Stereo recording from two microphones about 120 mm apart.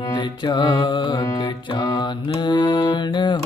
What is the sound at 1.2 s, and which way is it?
Mantra, 30° left (ahead or behind).